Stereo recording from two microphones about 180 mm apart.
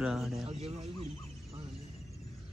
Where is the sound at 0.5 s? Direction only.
35° right (ahead or behind).